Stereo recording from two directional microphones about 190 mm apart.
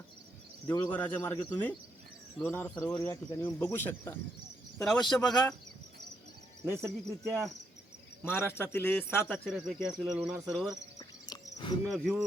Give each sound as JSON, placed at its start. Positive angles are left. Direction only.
{"t": 0.7, "sound": "speech", "side_deg": 10}
{"t": 4.8, "sound": "speech", "side_deg": 0}
{"t": 6.7, "sound": "speech", "side_deg": -15}
{"t": 7.3, "sound": "speech", "side_deg": 0}
{"t": 8.3, "sound": "speech", "side_deg": 10}
{"t": 9.3, "sound": "speech", "side_deg": 0}
{"t": 10.9, "sound": "cricket", "side_deg": 20}
{"t": 11.9, "sound": "speech", "side_deg": 0}